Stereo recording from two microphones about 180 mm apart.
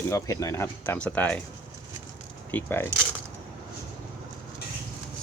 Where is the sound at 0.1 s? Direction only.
20° left (ahead or behind).